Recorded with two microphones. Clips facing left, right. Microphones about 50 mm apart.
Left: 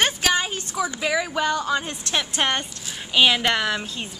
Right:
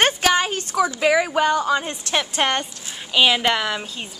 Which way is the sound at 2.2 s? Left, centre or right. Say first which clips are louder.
Right 2 dB; centre.